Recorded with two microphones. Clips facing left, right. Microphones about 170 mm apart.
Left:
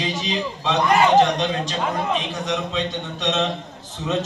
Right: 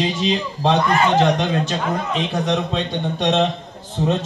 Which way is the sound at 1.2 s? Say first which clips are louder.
Right 2 dB; 55° right (ahead or behind).